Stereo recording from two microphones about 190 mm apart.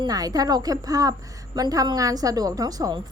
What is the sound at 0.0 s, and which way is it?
A woman's voice, 20° right (ahead or behind).